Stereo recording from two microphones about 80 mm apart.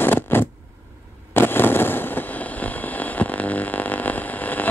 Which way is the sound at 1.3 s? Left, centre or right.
Left.